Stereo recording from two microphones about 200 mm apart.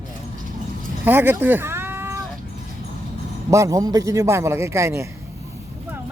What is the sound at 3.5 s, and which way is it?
A man's voice, 15° right (ahead or behind).